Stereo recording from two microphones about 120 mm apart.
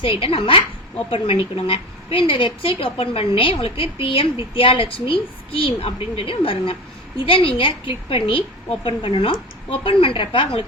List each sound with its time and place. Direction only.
0.0 s a woman's voice: 50° left (ahead or behind)